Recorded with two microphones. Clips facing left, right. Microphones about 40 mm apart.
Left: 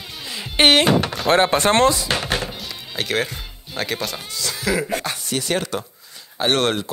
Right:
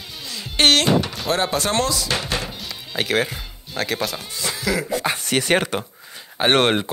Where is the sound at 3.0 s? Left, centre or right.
Centre.